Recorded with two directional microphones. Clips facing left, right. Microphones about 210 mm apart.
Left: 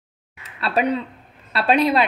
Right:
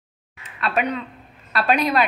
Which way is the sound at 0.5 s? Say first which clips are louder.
Left 3 dB; 35° left (ahead or behind).